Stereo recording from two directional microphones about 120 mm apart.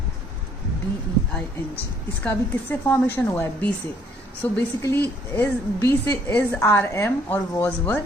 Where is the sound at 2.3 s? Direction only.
15° left (ahead or behind).